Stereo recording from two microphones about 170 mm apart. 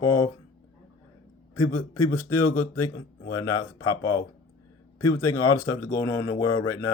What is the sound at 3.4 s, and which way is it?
Speech, 20° left (ahead or behind).